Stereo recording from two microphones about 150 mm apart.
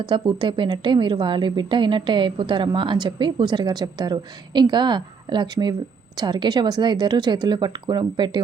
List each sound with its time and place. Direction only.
0.0 s speech: 30° right (ahead or behind)